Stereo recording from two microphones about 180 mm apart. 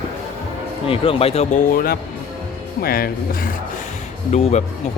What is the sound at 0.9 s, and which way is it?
Speech, 30° left (ahead or behind).